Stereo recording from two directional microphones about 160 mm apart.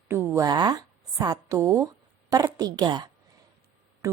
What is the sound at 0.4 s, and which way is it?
A woman's voice, 25° right (ahead or behind).